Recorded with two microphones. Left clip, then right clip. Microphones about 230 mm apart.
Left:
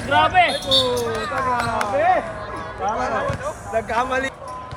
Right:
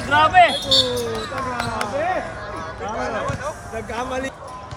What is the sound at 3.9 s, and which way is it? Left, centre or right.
Speech, centre.